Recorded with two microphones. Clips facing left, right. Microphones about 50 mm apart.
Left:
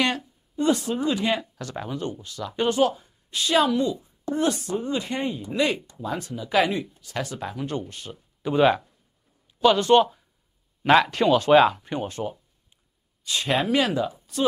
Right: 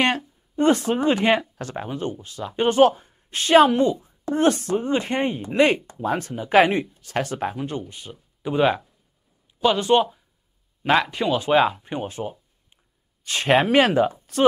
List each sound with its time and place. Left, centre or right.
0.6 s a woman's voice: right
3.9 s a sound: right
4.3 s speech: right
7.9 s speech: centre
13.2 s speech: right